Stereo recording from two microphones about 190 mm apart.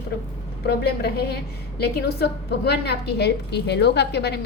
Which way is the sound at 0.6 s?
55° left (ahead or behind).